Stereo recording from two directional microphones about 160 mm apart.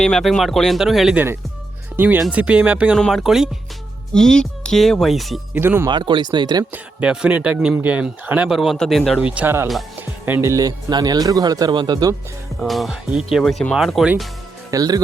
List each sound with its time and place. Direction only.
0.0 s a man's voice: 5° left (ahead or behind)
5.5 s a man's voice: 15° right (ahead or behind)
5.9 s speech: 30° right (ahead or behind)
6.7 s a man's voice: 5° right (ahead or behind); by 12.1 s 25° right (ahead or behind)
12.5 s speech: centre (ahead or behind)
14.7 s speech: 25° right (ahead or behind)